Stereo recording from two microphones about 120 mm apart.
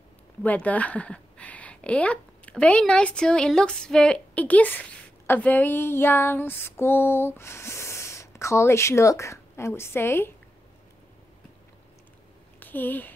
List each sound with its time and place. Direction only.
0.4 s speech: 10° left (ahead or behind)
12.5 s speech: 15° left (ahead or behind)